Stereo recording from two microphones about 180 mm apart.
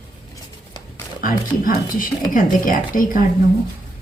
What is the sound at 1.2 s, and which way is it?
Speech, 50° left (ahead or behind).